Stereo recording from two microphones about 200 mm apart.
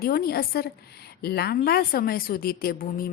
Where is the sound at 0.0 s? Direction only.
50° left (ahead or behind).